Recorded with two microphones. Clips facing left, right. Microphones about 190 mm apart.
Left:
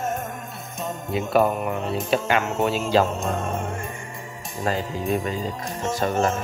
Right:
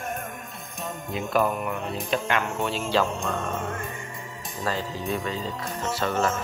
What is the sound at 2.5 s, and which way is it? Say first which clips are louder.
Speech: left 6 dB; 40° left (ahead or behind).